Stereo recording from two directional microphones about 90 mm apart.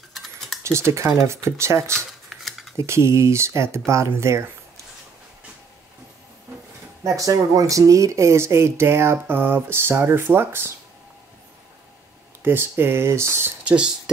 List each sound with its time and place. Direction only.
0.1 s a sound: centre (ahead or behind)
0.7 s speech: 30° right (ahead or behind)
2.2 s scissors: centre (ahead or behind)
2.8 s speech: 30° right (ahead or behind)
7.0 s speech: 35° right (ahead or behind)
12.4 s speech: 25° right (ahead or behind)
13.7 s speech: 10° right (ahead or behind)